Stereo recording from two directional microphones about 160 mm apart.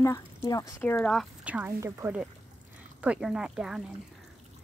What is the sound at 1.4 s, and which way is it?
Speech, 10° right (ahead or behind).